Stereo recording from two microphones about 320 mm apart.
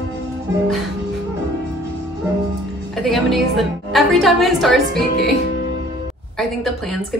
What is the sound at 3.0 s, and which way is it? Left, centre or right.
A woman's voice, centre.